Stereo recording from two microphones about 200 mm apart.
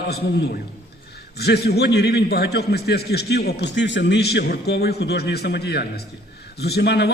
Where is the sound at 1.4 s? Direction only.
55° left (ahead or behind).